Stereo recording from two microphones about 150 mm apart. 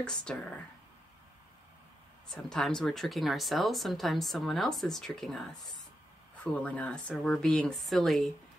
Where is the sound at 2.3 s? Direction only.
5° left (ahead or behind).